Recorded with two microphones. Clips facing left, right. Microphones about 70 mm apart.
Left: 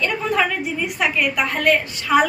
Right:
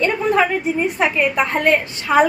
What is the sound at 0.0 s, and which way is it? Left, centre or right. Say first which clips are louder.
A woman's voice: right 4 dB; right.